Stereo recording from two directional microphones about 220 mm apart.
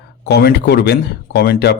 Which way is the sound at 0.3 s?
45° left (ahead or behind).